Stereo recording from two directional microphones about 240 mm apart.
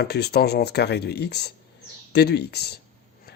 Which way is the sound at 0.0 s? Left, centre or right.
Left.